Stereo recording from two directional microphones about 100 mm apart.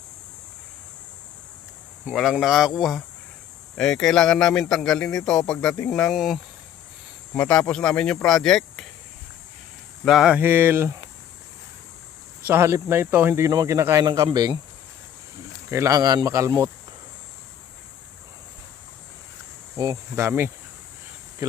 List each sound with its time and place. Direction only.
2.3 s a man's voice: 5° right (ahead or behind); by 5.9 s 15° left (ahead or behind)
5.9 s a man's voice: centre (ahead or behind)
7.3 s speech: 10° left (ahead or behind)
10.0 s a man's voice: 5° right (ahead or behind)
10.3 s speech: 20° right (ahead or behind)
12.5 s speech: 25° right (ahead or behind)
14.0 s speech: 45° right (ahead or behind)
15.7 s speech: 30° right (ahead or behind)
19.7 s speech: 35° right (ahead or behind)